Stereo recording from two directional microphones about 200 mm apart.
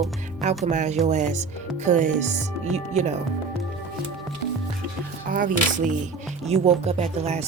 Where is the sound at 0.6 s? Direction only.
35° right (ahead or behind).